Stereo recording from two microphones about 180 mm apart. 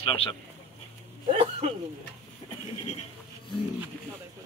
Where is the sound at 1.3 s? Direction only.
40° right (ahead or behind).